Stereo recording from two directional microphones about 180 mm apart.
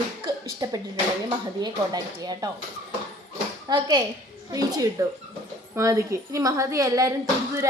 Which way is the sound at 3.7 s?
25° right (ahead or behind).